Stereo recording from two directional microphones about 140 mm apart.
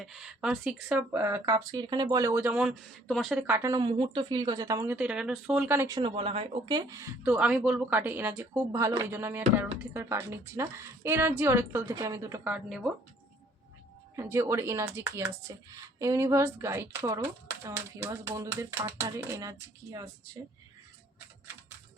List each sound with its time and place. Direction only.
0.0 s a woman's voice: 5° right (ahead or behind)
2.6 s speech: centre (ahead or behind)
3.3 s speech: 15° right (ahead or behind)
4.9 s a woman's voice: 5° right (ahead or behind)
6.0 s speech: 40° right (ahead or behind)
6.7 s speech: 25° right (ahead or behind)
7.3 s a woman's voice: 10° right (ahead or behind)
12.5 s a woman's voice: 5° right (ahead or behind)
14.2 s speech: 20° right (ahead or behind)